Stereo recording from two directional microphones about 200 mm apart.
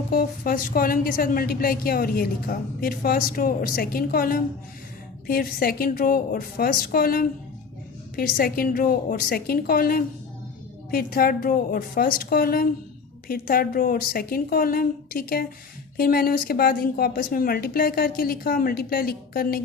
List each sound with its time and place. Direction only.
0.1 s a woman's voice: 45° left (ahead or behind)